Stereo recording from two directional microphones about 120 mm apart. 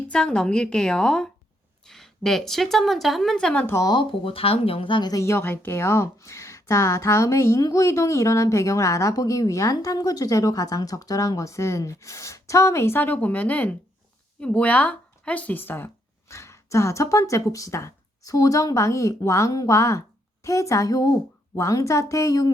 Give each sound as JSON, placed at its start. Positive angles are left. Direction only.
{"t": 0.1, "sound": "speech", "side_deg": 5}
{"t": 3.8, "sound": "speech", "side_deg": 35}
{"t": 4.2, "sound": "speech", "side_deg": 50}